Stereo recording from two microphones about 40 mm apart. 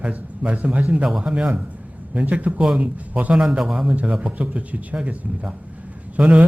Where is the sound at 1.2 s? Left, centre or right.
Right.